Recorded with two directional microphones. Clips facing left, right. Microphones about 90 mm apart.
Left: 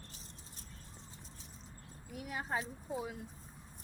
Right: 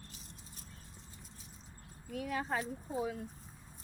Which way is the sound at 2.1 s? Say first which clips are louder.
Right 3 dB; 15° left (ahead or behind).